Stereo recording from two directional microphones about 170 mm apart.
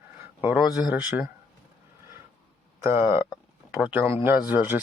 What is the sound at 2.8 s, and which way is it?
Speech, 15° right (ahead or behind).